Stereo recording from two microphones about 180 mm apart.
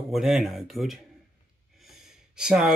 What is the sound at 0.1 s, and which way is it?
Speech, centre (ahead or behind).